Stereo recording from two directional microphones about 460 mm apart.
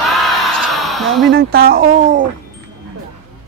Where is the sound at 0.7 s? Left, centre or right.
Centre.